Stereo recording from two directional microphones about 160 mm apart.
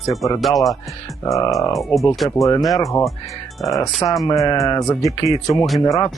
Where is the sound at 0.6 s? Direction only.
Centre (ahead or behind).